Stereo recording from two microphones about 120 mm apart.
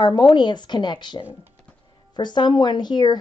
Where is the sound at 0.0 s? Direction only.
40° left (ahead or behind).